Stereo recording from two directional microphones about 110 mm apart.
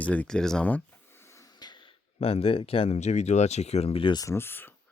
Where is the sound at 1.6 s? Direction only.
40° left (ahead or behind).